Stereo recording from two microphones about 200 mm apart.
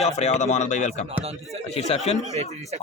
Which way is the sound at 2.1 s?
15° left (ahead or behind).